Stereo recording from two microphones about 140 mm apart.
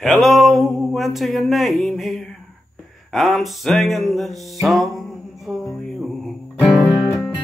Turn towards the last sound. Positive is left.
turn(degrees=20)  # may be behind; listen again after turning